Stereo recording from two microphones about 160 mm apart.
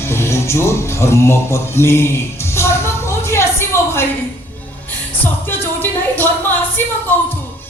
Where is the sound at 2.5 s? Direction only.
15° left (ahead or behind).